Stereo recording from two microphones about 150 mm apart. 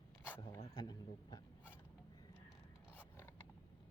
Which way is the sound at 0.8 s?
25° left (ahead or behind).